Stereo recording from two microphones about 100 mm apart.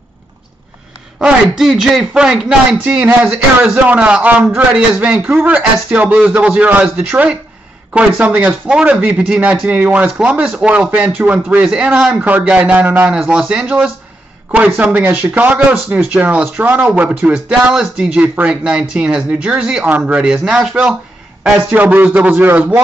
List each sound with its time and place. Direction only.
1.2 s speech: 10° right (ahead or behind)
21.6 s speech: 15° right (ahead or behind)